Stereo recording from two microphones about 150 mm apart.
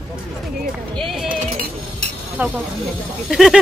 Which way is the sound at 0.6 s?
Centre (ahead or behind).